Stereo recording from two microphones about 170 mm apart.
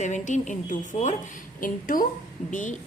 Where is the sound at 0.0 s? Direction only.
45° left (ahead or behind).